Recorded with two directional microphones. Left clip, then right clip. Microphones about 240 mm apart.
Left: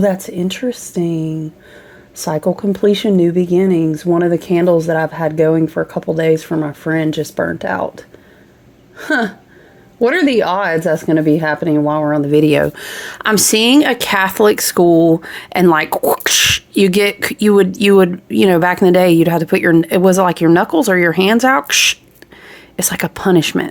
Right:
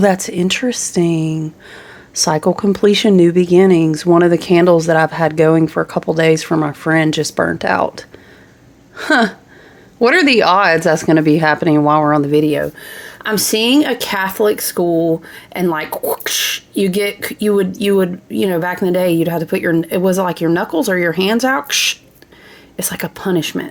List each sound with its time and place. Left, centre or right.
0.0 s speech: centre
12.3 s speech: left